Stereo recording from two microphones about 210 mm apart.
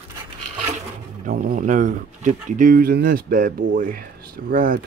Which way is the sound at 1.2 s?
40° right (ahead or behind).